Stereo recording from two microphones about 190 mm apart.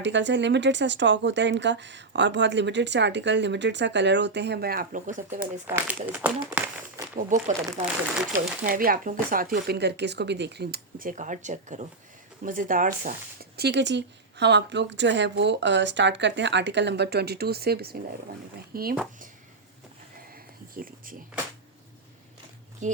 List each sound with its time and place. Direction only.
0.0 s speech: 70° right (ahead or behind); by 5.2 s 40° right (ahead or behind)
5.3 s speech: 10° right (ahead or behind)
7.2 s speech: 40° right (ahead or behind)
8.6 s speech: 50° right (ahead or behind)
20.7 s speech: 45° right (ahead or behind)
22.8 s speech: 40° right (ahead or behind)